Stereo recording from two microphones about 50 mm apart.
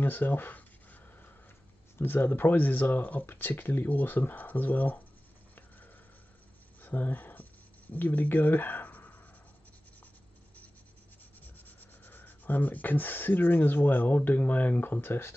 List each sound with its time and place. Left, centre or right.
0.0 s speech: left
2.0 s speech: left
6.8 s a sound: left
11.4 s rub: left